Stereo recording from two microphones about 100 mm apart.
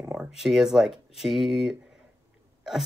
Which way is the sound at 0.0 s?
10° right (ahead or behind).